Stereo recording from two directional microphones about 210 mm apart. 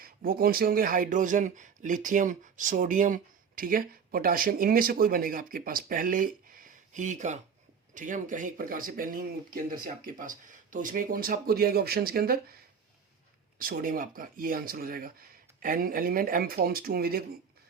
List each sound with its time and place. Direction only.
0.0 s speech: 45° right (ahead or behind)
13.6 s speech: 45° right (ahead or behind)